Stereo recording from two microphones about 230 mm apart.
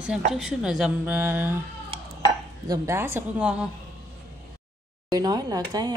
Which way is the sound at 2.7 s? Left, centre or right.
Centre.